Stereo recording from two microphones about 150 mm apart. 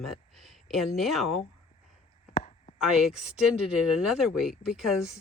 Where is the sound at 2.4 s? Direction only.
50° left (ahead or behind).